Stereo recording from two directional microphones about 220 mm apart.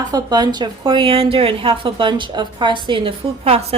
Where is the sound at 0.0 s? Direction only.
20° right (ahead or behind).